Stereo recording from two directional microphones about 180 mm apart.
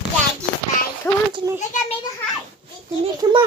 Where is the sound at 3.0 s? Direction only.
25° right (ahead or behind).